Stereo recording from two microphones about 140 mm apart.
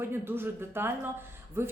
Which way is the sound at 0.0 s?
15° right (ahead or behind).